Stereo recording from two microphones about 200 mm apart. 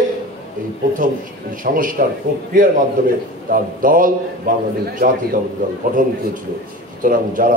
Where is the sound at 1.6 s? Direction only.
45° right (ahead or behind).